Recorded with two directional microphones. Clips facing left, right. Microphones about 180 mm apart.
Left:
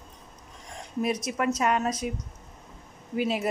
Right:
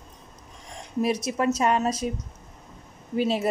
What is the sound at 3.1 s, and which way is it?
Speech, 30° right (ahead or behind).